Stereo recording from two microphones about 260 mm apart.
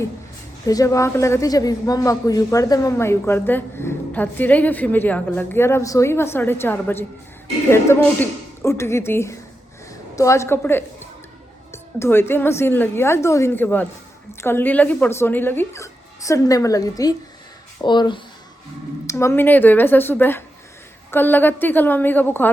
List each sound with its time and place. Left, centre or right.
0.7 s speech: centre